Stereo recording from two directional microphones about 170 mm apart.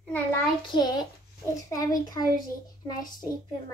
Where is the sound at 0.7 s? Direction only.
30° left (ahead or behind).